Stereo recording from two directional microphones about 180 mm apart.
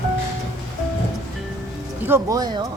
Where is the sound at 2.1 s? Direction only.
15° right (ahead or behind).